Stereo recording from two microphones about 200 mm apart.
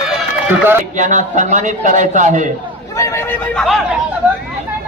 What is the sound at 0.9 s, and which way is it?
A man's voice, 40° right (ahead or behind).